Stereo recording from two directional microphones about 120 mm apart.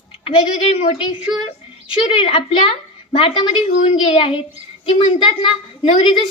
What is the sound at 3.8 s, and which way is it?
Speech, 65° left (ahead or behind).